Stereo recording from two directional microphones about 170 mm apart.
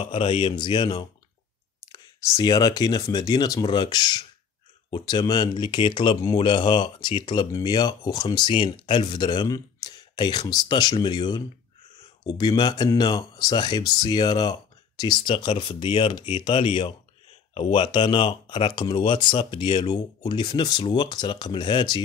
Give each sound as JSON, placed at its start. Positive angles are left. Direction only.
{"t": 0.0, "sound": "speech", "side_deg": 30}